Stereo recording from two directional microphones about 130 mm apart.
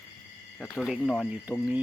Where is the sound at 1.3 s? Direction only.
10° right (ahead or behind).